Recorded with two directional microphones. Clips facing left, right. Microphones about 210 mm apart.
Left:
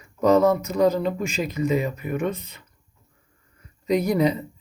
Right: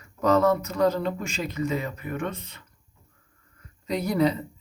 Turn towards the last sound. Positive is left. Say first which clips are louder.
# left 3 dB
turn(degrees=15)  # may be behind; listen again after turning